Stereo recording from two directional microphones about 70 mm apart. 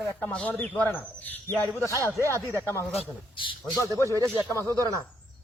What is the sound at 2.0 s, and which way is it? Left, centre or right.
Speech, right.